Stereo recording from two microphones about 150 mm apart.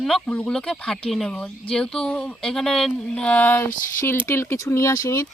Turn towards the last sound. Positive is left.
turn(degrees=20)  # may be behind; listen again after turning